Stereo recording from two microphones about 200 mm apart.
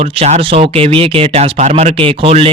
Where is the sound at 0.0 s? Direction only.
30° right (ahead or behind).